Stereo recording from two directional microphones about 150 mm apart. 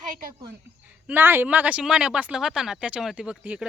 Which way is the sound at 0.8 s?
10° right (ahead or behind).